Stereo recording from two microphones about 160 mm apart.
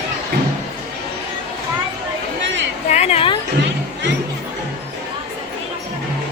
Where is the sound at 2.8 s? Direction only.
45° left (ahead or behind).